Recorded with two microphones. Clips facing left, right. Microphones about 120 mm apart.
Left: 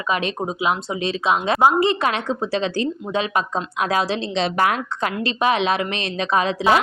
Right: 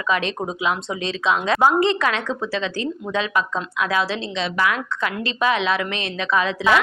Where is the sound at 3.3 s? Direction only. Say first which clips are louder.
Even; 30° left (ahead or behind).